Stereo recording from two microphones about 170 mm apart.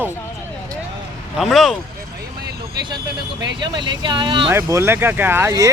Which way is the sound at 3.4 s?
25° right (ahead or behind).